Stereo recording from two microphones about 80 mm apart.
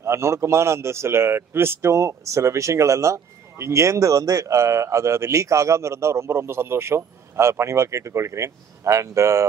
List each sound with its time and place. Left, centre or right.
0.0 s a man's voice: right